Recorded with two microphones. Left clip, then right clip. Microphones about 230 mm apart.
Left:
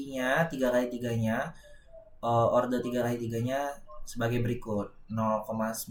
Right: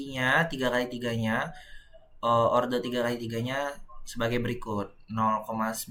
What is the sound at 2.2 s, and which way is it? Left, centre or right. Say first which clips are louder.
Speech: right 3 dB; right.